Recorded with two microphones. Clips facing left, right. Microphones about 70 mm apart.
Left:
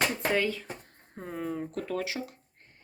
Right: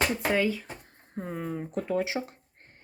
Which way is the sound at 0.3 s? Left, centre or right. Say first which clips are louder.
Right 2 dB; centre.